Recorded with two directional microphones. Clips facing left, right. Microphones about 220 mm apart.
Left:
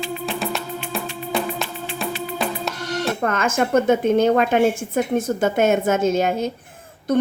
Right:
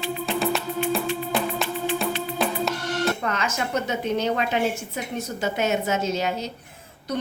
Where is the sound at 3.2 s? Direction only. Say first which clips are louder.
Left 7 dB; 50° left (ahead or behind).